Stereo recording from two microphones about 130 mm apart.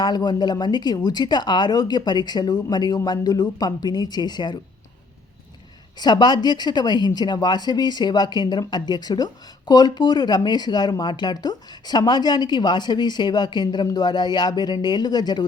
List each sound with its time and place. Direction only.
0.0 s a woman's voice: 35° left (ahead or behind)
6.0 s a woman's voice: 35° left (ahead or behind)